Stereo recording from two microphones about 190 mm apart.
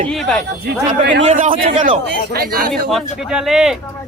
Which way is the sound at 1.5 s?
30° right (ahead or behind).